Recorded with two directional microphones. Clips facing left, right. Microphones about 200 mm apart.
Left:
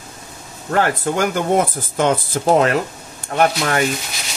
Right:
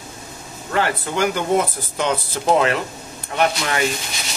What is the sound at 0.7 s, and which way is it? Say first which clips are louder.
Speech: left 3 dB; 50° left (ahead or behind).